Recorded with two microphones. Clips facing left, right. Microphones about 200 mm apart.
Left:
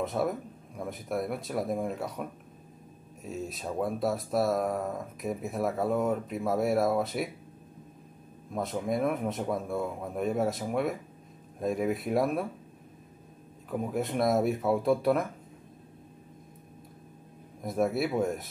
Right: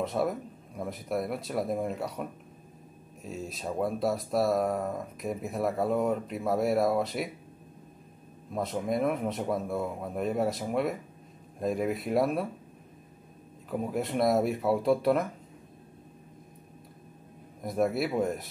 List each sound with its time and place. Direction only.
0.0 s speech: centre (ahead or behind)
3.3 s speech: centre (ahead or behind)
8.5 s speech: centre (ahead or behind)
13.7 s speech: centre (ahead or behind)
17.6 s speech: centre (ahead or behind)